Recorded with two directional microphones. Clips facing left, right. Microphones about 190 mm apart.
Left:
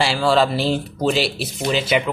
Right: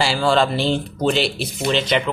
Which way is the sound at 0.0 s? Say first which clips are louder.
Left 1 dB; centre (ahead or behind).